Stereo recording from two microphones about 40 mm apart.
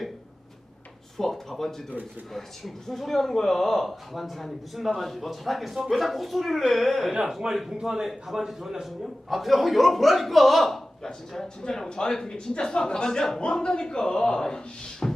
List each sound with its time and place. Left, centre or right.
1.2 s a sound: centre
2.3 s speech: centre
7.1 s a man's voice: centre
15.0 s music: centre